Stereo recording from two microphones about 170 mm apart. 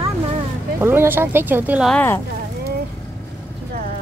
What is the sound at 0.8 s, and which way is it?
Speech, 15° right (ahead or behind).